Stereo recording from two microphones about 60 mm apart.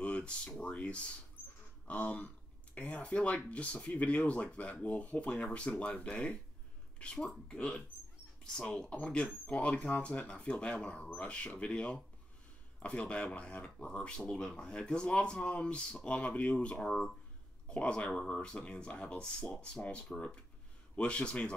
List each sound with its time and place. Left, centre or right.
0.0 s speech: centre
16.7 s speech: centre
17.6 s speech: centre